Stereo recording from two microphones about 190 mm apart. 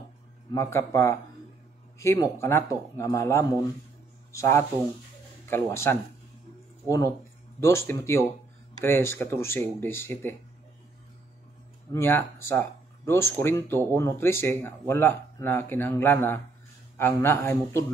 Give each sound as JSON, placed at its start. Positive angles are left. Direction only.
{"t": 0.5, "sound": "speech", "side_deg": 15}
{"t": 7.6, "sound": "speech", "side_deg": 15}
{"t": 11.9, "sound": "speech", "side_deg": 10}